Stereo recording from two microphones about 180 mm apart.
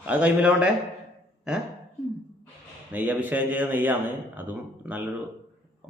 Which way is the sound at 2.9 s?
10° right (ahead or behind).